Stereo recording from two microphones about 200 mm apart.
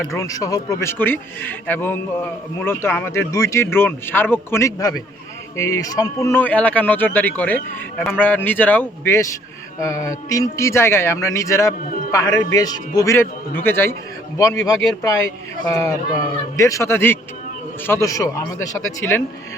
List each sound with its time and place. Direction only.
0.1 s a man's voice: 15° left (ahead or behind)